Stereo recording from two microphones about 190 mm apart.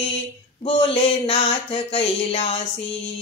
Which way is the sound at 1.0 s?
25° left (ahead or behind).